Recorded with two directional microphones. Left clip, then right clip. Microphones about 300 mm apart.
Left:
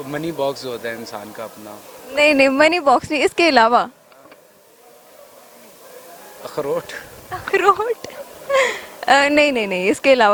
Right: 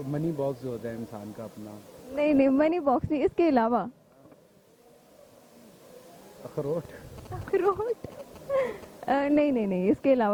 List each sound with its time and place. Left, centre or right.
0.3 s a woman's voice: left
6.4 s a woman's voice: centre